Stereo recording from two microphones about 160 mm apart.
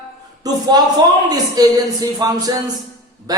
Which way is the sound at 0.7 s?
25° right (ahead or behind).